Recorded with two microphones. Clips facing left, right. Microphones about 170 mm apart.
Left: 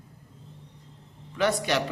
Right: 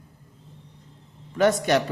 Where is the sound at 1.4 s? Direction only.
45° right (ahead or behind).